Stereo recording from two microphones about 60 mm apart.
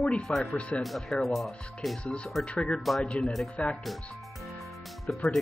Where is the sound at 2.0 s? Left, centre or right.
Centre.